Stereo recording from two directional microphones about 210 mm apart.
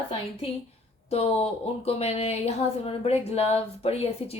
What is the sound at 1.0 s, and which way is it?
Speech, 30° left (ahead or behind).